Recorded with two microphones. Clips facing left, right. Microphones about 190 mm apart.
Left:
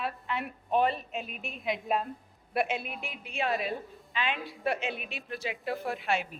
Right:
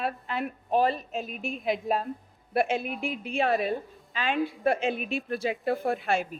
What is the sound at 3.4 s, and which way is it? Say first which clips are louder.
A woman's voice: right 5 dB; 50° right (ahead or behind).